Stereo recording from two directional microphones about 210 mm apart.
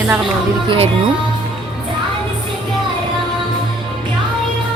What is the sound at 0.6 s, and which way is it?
Speech, 30° right (ahead or behind).